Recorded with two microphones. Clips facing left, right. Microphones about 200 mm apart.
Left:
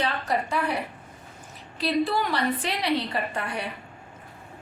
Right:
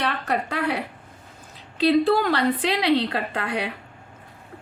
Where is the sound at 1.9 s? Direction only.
85° right.